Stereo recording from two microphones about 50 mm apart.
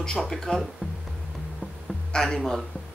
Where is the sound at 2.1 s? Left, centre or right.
Centre.